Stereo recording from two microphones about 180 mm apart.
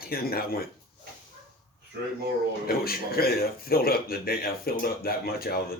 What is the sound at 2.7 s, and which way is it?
Speech, 55° left (ahead or behind).